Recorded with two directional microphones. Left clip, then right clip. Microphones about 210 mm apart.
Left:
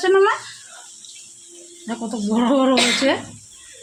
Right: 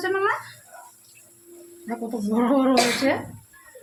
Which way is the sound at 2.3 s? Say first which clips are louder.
Left 3 dB; 45° left (ahead or behind).